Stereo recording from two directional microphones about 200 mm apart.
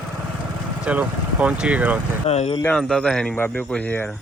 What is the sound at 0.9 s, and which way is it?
Speech, 5° right (ahead or behind).